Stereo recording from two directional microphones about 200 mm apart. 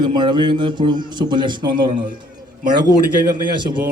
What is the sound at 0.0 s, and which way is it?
A man's voice, 20° right (ahead or behind).